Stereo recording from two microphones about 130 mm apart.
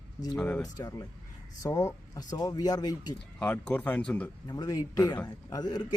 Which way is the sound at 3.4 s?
10° left (ahead or behind).